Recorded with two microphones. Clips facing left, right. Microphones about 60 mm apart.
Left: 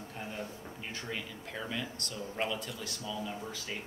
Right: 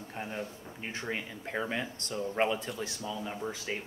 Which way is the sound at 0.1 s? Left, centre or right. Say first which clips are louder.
Right 5 dB; right.